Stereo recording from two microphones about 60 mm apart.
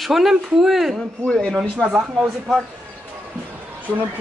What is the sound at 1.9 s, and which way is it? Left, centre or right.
Speech, centre.